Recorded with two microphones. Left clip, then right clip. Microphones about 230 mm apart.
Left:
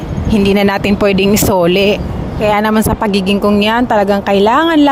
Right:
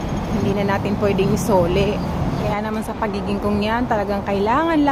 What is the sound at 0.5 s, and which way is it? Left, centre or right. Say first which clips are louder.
A woman's voice: left 7 dB; left.